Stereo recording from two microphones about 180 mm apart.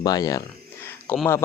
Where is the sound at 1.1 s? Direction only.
10° left (ahead or behind).